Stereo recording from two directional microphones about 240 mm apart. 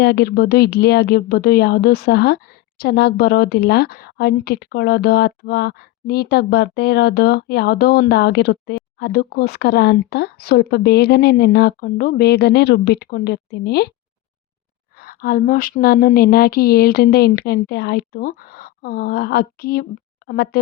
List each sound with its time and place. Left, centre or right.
0.0 s speech: left
14.9 s speech: left